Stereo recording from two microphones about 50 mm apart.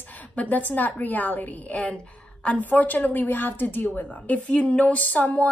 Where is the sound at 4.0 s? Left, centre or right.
Left.